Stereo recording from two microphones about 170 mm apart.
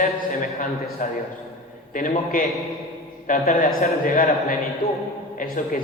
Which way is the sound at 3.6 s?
40° left (ahead or behind).